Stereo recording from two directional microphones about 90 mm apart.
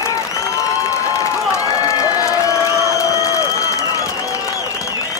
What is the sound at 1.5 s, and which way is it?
Crowd, 40° left (ahead or behind).